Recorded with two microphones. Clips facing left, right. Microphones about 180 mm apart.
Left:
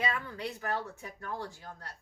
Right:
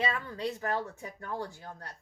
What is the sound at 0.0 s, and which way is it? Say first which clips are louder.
Speech: right 2 dB; 25° right (ahead or behind).